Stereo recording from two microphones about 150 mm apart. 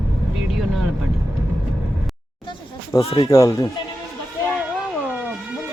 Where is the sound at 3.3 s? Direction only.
20° left (ahead or behind).